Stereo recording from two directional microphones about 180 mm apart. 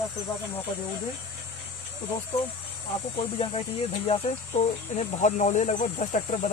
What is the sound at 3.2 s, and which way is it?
Speech, 35° left (ahead or behind).